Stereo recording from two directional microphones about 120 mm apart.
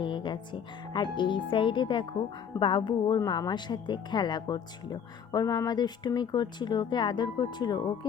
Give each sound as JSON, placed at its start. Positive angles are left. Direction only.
{"t": 0.0, "sound": "speech", "side_deg": 40}